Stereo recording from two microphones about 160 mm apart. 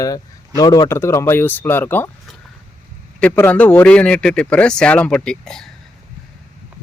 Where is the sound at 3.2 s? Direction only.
10° left (ahead or behind).